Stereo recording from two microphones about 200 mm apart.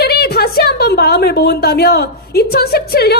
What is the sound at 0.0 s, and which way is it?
A woman's voice, 50° left (ahead or behind).